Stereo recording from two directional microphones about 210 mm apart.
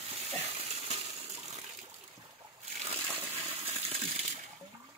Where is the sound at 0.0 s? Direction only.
30° right (ahead or behind).